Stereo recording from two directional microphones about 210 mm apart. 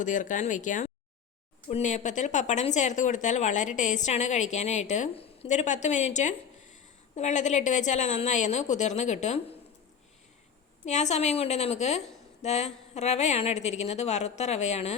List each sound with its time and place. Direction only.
0.0 s speech: 40° left (ahead or behind)
10.8 s speech: 35° left (ahead or behind)